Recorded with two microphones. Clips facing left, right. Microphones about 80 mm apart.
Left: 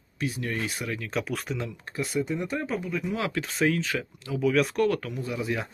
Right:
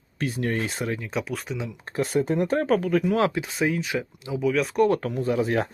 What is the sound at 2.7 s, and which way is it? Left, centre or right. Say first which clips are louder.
Speech: right 8 dB; right.